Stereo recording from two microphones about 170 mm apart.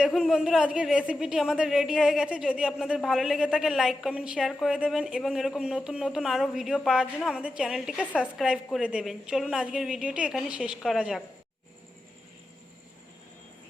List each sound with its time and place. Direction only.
0.0 s a woman's voice: centre (ahead or behind)